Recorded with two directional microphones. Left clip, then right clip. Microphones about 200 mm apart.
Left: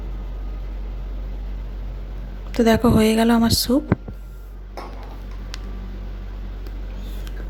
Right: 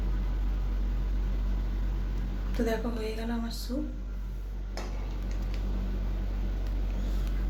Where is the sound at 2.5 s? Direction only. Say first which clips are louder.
Left 15 dB; 50° left (ahead or behind).